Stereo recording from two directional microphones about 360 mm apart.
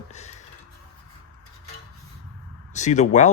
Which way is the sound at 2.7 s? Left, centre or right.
Centre.